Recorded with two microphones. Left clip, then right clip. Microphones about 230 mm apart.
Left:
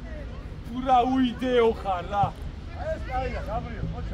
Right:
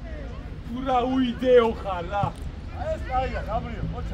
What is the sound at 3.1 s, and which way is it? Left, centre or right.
Speech, right.